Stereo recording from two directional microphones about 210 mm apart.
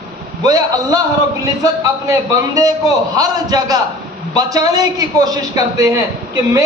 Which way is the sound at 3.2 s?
20° right (ahead or behind).